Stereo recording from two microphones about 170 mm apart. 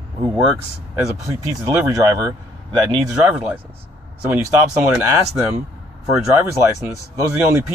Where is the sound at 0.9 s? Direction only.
15° right (ahead or behind).